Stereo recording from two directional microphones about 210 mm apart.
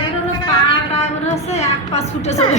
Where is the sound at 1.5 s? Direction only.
30° left (ahead or behind).